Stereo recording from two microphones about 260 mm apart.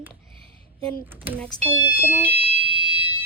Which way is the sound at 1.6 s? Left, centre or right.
Centre.